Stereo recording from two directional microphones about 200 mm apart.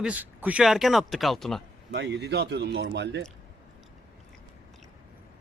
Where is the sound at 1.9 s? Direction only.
55° right (ahead or behind).